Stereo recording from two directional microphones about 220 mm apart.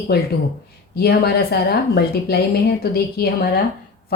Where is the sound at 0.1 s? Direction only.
45° left (ahead or behind).